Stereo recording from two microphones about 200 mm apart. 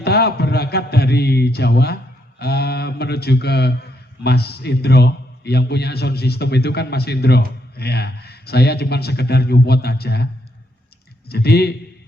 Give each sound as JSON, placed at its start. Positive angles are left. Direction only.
{"t": 0.0, "sound": "a man's voice", "side_deg": 55}
{"t": 11.3, "sound": "a man's voice", "side_deg": 55}